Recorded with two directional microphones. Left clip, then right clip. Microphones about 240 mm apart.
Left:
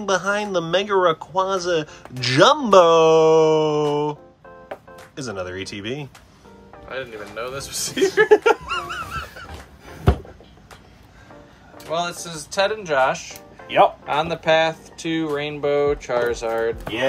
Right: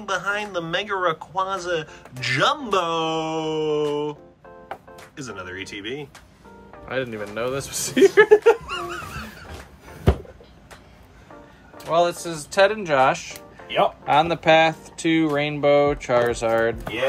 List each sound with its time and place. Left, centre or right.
0.0 s speech: centre
6.9 s speech: right
8.3 s speech: left
11.9 s speech: right